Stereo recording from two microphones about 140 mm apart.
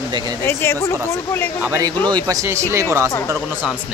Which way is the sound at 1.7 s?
25° right (ahead or behind).